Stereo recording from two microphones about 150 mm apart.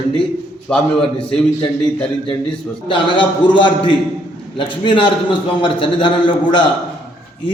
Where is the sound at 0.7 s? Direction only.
5° left (ahead or behind).